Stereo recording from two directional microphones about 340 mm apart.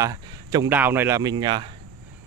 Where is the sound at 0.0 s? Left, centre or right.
Centre.